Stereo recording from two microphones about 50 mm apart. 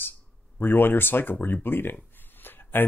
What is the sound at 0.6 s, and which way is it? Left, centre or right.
Speech, left.